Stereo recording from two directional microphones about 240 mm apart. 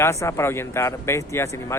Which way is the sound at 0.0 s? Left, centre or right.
Centre.